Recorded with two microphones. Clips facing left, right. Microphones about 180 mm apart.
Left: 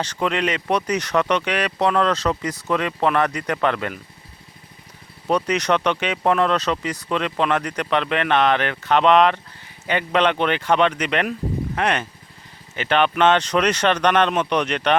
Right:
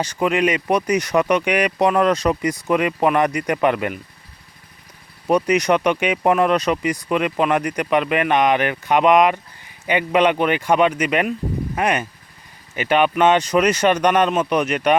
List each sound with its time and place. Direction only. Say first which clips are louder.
0.0 s speech: right 4 dB; 10° right (ahead or behind)
5.3 s speech: right 3 dB; 10° right (ahead or behind)